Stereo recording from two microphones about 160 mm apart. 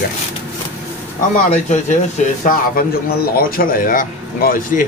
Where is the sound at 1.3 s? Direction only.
50° left (ahead or behind).